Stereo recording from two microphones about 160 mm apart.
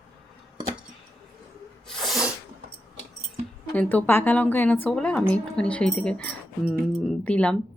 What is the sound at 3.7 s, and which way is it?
A woman's voice, 10° left (ahead or behind).